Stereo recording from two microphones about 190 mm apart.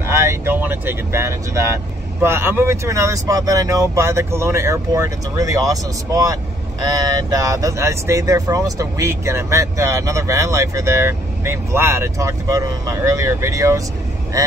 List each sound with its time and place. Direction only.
0.0 s vehicle: 15° right (ahead or behind)
2.2 s speech: 10° right (ahead or behind)